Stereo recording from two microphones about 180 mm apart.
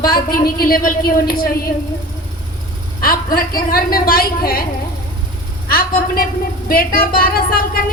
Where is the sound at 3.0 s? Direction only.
55° left (ahead or behind).